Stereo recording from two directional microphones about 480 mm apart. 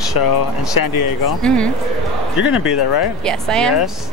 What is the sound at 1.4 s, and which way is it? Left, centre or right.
Speech, centre.